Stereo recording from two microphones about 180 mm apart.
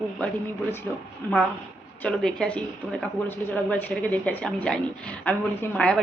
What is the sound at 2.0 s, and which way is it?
Speech, 5° left (ahead or behind).